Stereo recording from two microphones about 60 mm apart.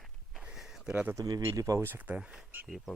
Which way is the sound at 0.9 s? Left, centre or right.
Right.